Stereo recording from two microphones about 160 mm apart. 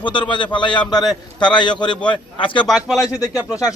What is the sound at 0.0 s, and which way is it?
A man's voice, 30° left (ahead or behind).